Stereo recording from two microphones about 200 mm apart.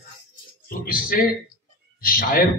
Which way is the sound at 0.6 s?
45° left (ahead or behind).